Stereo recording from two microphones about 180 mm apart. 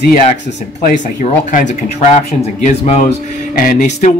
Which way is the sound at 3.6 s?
50° left (ahead or behind).